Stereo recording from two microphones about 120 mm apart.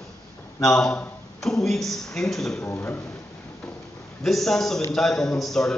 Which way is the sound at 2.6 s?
20° left (ahead or behind).